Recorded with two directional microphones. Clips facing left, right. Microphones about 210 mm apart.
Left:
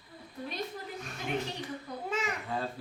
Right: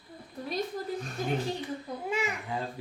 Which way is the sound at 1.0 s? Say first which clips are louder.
Right 6 dB; 35° right (ahead or behind).